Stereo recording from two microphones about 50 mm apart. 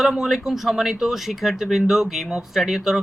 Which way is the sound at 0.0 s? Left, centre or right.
Centre.